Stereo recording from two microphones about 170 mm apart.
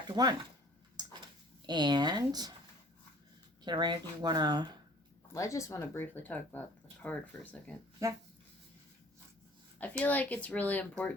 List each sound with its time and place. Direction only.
0.1 s speech: 25° right (ahead or behind)
1.6 s speech: 25° right (ahead or behind)
3.6 s speech: 25° right (ahead or behind)
5.3 s speech: 20° left (ahead or behind)
10.0 s speech: 10° left (ahead or behind)